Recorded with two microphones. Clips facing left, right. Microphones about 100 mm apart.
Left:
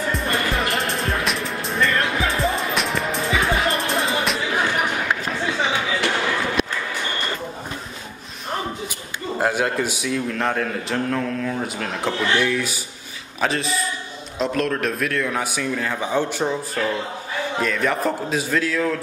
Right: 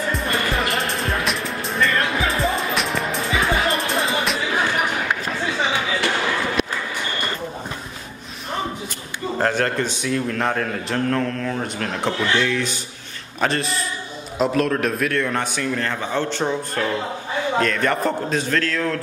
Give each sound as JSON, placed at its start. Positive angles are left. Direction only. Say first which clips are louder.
{"t": 0.1, "sound": "music", "louder": "even", "side_deg": 0}
{"t": 9.4, "sound": "a man's voice", "louder": "even", "side_deg": 10}